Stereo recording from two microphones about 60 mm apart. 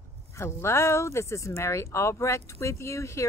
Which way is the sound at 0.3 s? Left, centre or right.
Left.